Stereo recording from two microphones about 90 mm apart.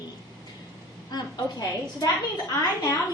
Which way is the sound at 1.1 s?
45° left (ahead or behind).